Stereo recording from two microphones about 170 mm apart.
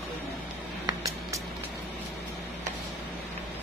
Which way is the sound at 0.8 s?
20° right (ahead or behind).